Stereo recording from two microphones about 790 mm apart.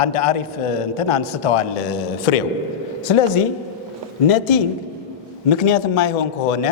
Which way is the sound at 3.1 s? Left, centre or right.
Left.